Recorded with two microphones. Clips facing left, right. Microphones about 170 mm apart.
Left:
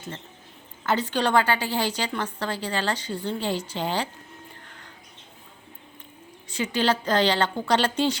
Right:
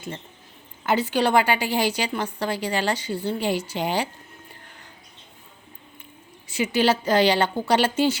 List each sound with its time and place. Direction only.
0.9 s a woman's voice: 10° right (ahead or behind)
6.5 s a woman's voice: 10° right (ahead or behind)